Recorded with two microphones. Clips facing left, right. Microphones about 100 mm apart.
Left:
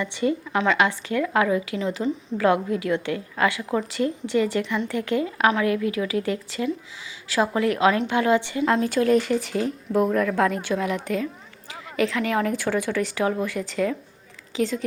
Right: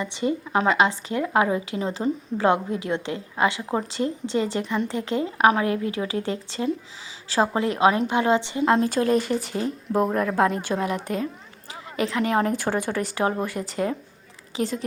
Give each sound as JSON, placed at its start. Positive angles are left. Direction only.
{"t": 0.0, "sound": "a woman's voice", "side_deg": -25}
{"t": 12.5, "sound": "speech", "side_deg": -40}